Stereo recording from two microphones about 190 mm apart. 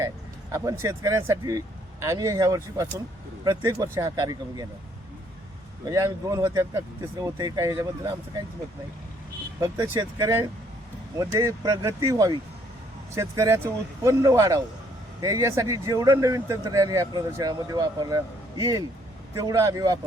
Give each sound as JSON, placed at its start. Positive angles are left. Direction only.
{"t": 0.5, "sound": "speech", "side_deg": -15}
{"t": 5.8, "sound": "speech", "side_deg": -20}
{"t": 9.6, "sound": "speech", "side_deg": -20}